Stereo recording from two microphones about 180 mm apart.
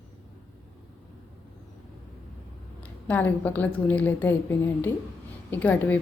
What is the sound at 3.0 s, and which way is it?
Speech, 10° left (ahead or behind).